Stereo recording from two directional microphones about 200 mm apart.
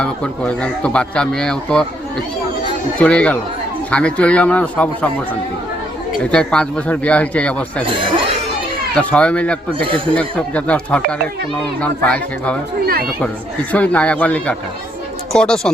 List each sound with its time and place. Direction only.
0.0 s speech: 5° left (ahead or behind)
3.0 s speech: 5° left (ahead or behind)
6.3 s speech: 5° left (ahead or behind)
7.9 s speech: 25° right (ahead or behind)
9.0 s speech: 5° left (ahead or behind)
12.8 s speech: 50° right (ahead or behind)
13.7 s speech: 5° left (ahead or behind)